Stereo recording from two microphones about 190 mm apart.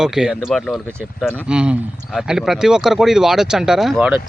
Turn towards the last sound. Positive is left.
turn(degrees=-5)  # may be behind; listen again after turning